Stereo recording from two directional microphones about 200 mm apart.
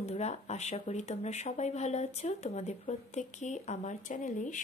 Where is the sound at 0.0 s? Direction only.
35° left (ahead or behind).